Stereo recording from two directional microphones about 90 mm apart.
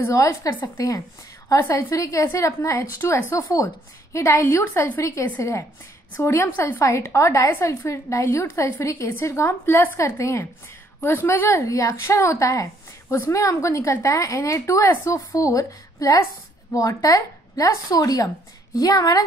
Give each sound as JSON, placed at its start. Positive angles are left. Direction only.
{"t": 0.0, "sound": "a woman's voice", "side_deg": 35}